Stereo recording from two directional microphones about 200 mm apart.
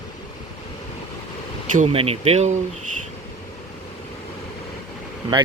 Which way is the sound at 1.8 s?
30° right (ahead or behind).